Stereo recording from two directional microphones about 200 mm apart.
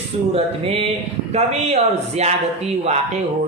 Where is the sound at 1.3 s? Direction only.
30° right (ahead or behind).